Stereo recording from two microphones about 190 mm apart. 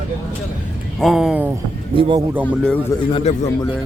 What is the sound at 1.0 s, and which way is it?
Speech, centre (ahead or behind).